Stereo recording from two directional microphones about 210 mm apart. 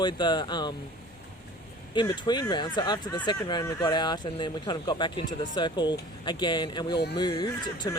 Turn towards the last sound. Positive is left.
turn(degrees=20)  # may be behind; listen again after turning